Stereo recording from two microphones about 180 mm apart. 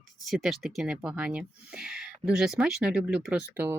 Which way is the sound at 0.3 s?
Centre (ahead or behind).